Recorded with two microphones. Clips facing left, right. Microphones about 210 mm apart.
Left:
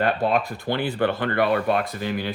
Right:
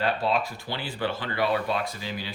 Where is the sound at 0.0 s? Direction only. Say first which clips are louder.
Left 4 dB; 50° left (ahead or behind).